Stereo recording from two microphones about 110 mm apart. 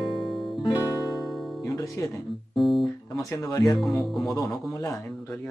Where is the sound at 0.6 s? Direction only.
40° left (ahead or behind).